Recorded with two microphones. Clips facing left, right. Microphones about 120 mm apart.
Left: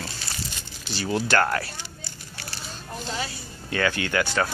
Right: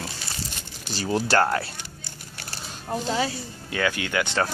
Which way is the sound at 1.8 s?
55° right (ahead or behind).